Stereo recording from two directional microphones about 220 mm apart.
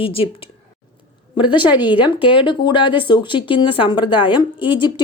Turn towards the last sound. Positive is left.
turn(degrees=20)  # may be behind; listen again after turning